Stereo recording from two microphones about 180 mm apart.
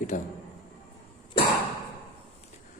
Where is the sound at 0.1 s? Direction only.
45° left (ahead or behind).